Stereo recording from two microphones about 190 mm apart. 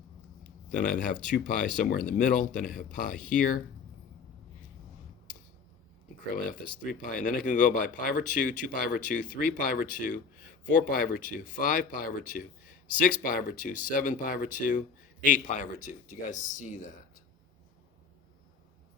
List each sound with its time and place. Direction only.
0.8 s speech: 45° left (ahead or behind)
6.8 s speech: 45° left (ahead or behind)